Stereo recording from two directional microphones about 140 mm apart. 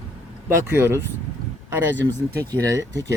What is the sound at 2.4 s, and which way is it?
Speech, 25° right (ahead or behind).